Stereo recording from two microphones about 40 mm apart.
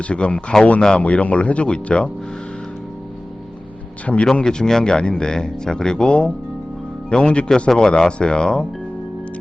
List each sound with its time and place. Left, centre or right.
0.0 s speech: left
0.8 s speech: centre
1.0 s speech: left
4.0 s speech: left
4.4 s speech: centre